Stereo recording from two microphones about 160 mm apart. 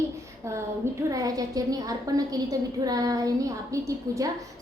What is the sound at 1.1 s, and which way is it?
A woman's voice, 20° right (ahead or behind).